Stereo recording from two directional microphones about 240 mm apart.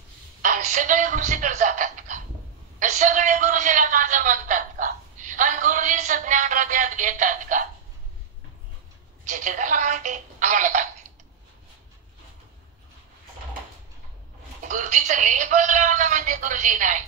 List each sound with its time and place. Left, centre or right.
0.4 s a man's voice: right
9.2 s speech: right
14.6 s speech: right